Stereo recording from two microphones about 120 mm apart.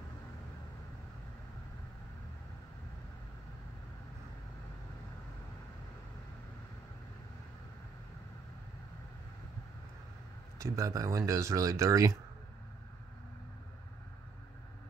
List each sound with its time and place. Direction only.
10.6 s speech: 25° right (ahead or behind)